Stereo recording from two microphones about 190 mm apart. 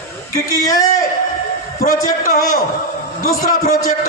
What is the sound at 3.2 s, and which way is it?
Speech, 45° left (ahead or behind).